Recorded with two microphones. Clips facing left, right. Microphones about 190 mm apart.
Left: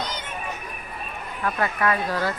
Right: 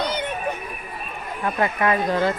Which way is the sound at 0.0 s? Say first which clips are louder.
Right 7 dB; 60° right (ahead or behind).